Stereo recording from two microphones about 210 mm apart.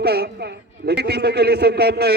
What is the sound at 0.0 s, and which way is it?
A man's voice, 50° right (ahead or behind).